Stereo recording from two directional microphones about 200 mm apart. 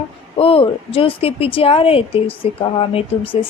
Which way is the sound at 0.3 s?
30° left (ahead or behind).